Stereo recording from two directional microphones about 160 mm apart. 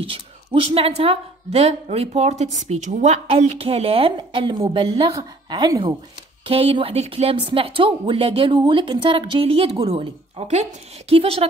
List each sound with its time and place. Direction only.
0.0 s a woman's voice: 35° right (ahead or behind)